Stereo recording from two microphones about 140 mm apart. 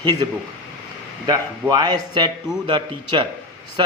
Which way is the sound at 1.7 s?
30° right (ahead or behind).